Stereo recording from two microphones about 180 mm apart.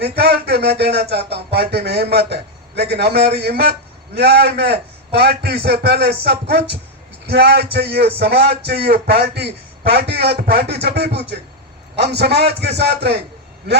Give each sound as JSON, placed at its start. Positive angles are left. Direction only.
{"t": 0.0, "sound": "speech", "side_deg": -60}